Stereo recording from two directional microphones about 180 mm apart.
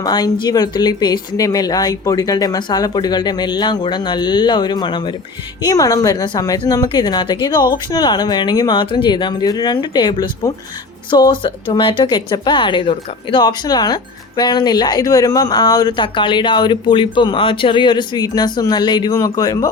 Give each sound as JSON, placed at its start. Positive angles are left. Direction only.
{"t": 0.0, "sound": "speech", "side_deg": 20}